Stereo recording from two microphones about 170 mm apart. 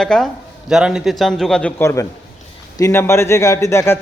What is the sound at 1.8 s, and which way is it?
A man's voice, 15° left (ahead or behind).